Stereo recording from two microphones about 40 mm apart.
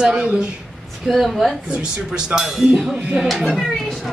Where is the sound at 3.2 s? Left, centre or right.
Centre.